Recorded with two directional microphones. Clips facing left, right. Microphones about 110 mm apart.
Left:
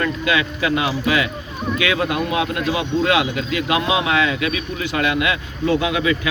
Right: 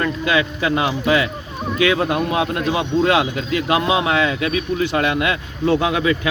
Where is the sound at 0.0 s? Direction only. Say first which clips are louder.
Right 1 dB; 30° right (ahead or behind).